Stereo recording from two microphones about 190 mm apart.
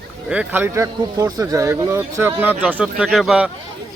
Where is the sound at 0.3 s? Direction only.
10° right (ahead or behind).